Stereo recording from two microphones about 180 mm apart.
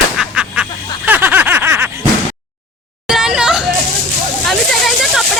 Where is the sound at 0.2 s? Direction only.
5° right (ahead or behind).